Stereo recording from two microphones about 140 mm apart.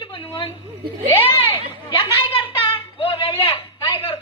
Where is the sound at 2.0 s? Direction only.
40° left (ahead or behind).